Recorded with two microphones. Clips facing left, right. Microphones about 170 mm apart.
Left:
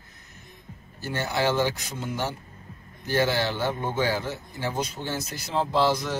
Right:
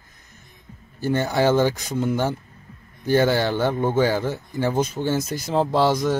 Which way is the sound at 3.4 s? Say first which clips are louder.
Right 6 dB; 50° right (ahead or behind).